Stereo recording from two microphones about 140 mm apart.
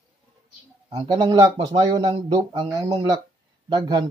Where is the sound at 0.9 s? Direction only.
30° right (ahead or behind).